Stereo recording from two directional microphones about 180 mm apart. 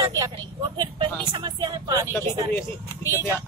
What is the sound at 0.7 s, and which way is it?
Speech, 30° right (ahead or behind).